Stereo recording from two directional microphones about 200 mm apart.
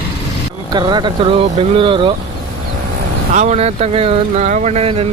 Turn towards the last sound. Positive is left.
turn(degrees=-30)  # may be behind; listen again after turning